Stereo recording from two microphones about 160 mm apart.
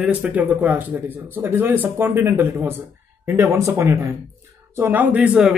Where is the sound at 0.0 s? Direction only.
10° right (ahead or behind).